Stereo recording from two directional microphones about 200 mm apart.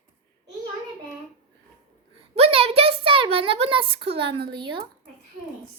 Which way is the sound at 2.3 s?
30° right (ahead or behind).